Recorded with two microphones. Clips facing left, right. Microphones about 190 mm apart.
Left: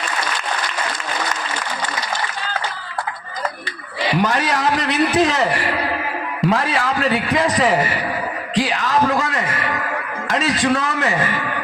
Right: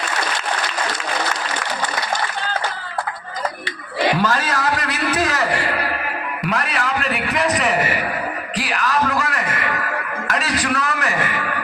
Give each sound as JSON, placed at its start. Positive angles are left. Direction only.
{"t": 4.2, "sound": "a man's voice", "side_deg": 20}
{"t": 8.5, "sound": "a sound", "side_deg": 25}
{"t": 10.3, "sound": "a man's voice", "side_deg": 25}